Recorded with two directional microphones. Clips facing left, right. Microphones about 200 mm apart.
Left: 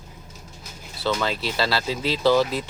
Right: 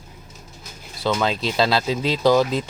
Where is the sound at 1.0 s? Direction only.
20° right (ahead or behind).